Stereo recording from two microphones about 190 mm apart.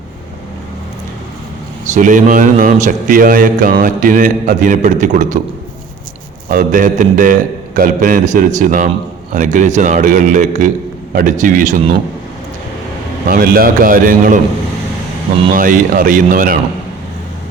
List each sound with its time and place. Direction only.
1.8 s a man's voice: 40° right (ahead or behind)
6.5 s a man's voice: 45° right (ahead or behind)
13.2 s a man's voice: 50° right (ahead or behind)
15.5 s a man's voice: 45° right (ahead or behind)